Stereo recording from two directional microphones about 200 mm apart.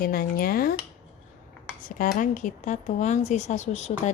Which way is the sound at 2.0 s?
40° left (ahead or behind).